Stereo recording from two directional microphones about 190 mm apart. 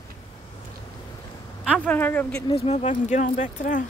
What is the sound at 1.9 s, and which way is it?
Speech, 10° left (ahead or behind).